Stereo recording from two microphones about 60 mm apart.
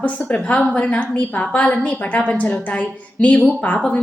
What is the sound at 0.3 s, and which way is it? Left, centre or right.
A woman's voice, left.